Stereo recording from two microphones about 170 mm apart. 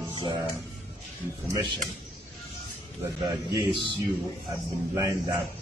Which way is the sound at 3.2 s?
25° right (ahead or behind).